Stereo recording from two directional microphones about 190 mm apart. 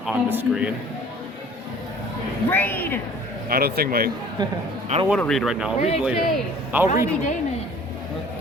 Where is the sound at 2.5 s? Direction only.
10° left (ahead or behind).